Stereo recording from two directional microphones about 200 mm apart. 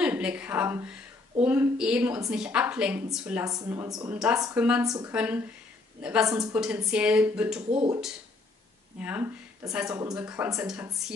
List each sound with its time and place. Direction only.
0.0 s a woman's voice: 5° right (ahead or behind)
4.1 s a woman's voice: 5° right (ahead or behind)
4.4 s speech: 15° right (ahead or behind)
5.1 s speech: 5° right (ahead or behind)
6.5 s a woman's voice: 5° right (ahead or behind)
9.0 s speech: 10° right (ahead or behind)